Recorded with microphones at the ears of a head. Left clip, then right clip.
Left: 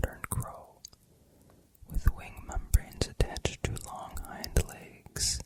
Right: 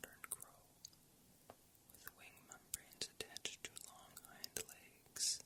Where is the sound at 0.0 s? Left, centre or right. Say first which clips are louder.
Left 17 dB; left.